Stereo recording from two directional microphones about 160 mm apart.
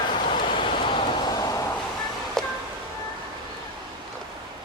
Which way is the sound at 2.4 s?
Centre (ahead or behind).